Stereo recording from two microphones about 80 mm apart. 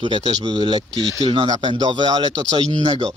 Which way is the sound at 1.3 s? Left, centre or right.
Right.